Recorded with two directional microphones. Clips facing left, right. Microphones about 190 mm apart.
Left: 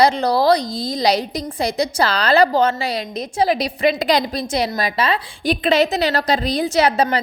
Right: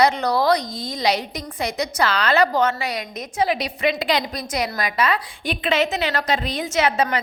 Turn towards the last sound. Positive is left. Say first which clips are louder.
# left 4 dB
turn(degrees=35)  # may be behind; listen again after turning